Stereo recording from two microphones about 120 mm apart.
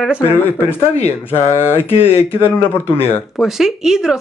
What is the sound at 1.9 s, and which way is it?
Speech, 20° left (ahead or behind).